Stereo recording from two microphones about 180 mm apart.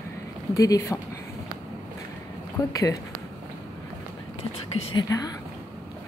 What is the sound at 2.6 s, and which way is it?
Speech, 20° left (ahead or behind).